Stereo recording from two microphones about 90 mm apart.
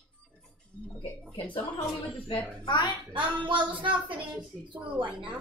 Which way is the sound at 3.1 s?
65° right (ahead or behind).